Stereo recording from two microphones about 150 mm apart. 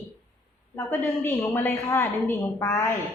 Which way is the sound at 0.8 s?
15° left (ahead or behind).